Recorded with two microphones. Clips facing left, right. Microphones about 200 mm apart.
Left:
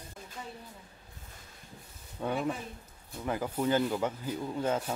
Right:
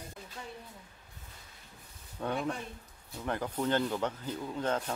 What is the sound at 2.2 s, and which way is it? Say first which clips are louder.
Speech: left 2 dB; 5° left (ahead or behind).